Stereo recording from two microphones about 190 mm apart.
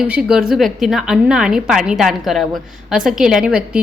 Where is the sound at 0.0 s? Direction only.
5° right (ahead or behind).